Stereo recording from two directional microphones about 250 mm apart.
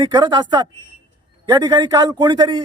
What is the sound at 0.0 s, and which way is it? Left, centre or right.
Speech, centre.